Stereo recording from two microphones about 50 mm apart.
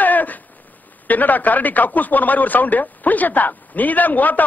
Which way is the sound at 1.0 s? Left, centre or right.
Left.